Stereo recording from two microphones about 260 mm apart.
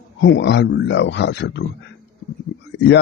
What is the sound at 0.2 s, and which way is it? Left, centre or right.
Speech, left.